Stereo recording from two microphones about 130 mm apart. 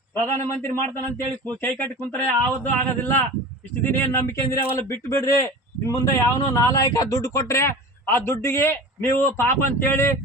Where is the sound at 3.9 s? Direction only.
15° left (ahead or behind).